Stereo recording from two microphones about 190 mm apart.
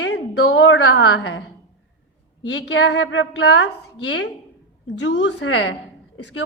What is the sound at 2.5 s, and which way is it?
A woman's voice, 70° left (ahead or behind).